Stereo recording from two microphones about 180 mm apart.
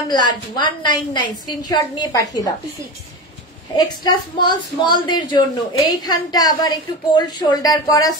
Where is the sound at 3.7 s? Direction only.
25° left (ahead or behind).